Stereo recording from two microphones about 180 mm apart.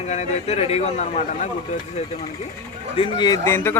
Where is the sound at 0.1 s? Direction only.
35° left (ahead or behind).